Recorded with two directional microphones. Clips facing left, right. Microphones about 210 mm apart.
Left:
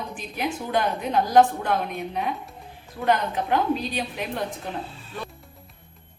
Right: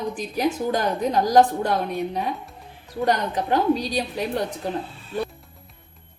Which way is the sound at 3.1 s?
35° right (ahead or behind).